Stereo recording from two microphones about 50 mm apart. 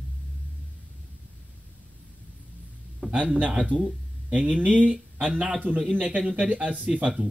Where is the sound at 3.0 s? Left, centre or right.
Centre.